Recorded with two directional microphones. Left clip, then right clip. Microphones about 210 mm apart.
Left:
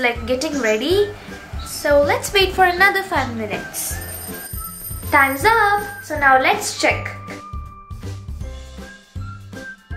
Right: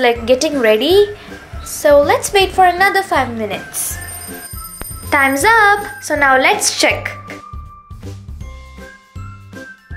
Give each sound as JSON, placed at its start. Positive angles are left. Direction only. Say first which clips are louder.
{"t": 0.0, "sound": "a woman's voice", "louder": "right 7 dB", "side_deg": -20}
{"t": 5.1, "sound": "music", "louder": "right 3 dB", "side_deg": -40}
{"t": 7.0, "sound": "music", "louder": "right 5 dB", "side_deg": -25}